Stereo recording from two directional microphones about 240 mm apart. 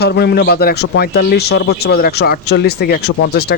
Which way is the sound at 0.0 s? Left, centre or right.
Left.